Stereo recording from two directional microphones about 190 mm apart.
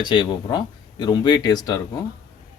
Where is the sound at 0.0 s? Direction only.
25° left (ahead or behind).